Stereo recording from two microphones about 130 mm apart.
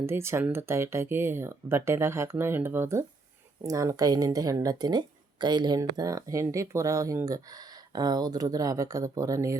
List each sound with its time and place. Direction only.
0.0 s speech: 20° right (ahead or behind)